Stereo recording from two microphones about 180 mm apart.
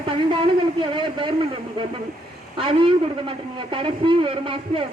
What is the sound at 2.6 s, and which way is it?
A man's voice, 30° right (ahead or behind).